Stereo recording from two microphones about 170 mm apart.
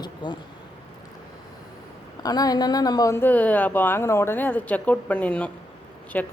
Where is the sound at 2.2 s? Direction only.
20° left (ahead or behind).